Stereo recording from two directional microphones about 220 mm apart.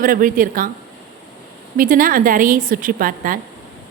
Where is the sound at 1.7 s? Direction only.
40° right (ahead or behind).